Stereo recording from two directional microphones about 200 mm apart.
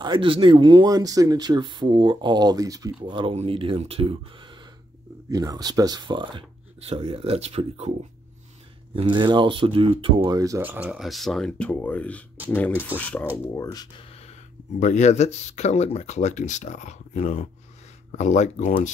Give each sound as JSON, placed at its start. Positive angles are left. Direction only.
{"t": 0.0, "sound": "speech", "side_deg": -25}
{"t": 8.9, "sound": "speech", "side_deg": -25}
{"t": 13.6, "sound": "speech", "side_deg": 20}
{"t": 14.8, "sound": "speech", "side_deg": 35}